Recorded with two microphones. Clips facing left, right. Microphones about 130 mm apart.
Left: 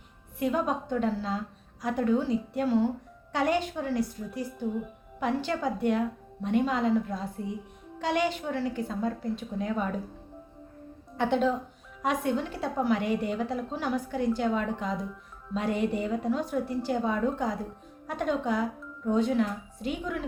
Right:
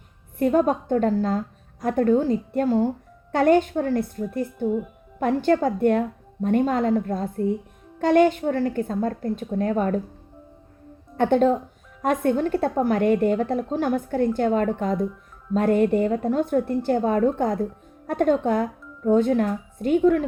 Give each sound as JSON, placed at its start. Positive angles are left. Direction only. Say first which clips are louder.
{"t": 0.3, "sound": "a woman's voice", "louder": "right 8 dB", "side_deg": -50}
{"t": 11.2, "sound": "a woman's voice", "louder": "right 7 dB", "side_deg": -50}